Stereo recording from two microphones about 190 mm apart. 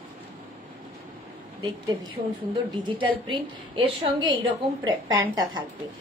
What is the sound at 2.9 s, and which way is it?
A woman's voice, 25° right (ahead or behind).